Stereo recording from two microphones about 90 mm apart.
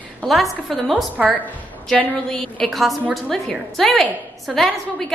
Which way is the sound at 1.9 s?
10° left (ahead or behind).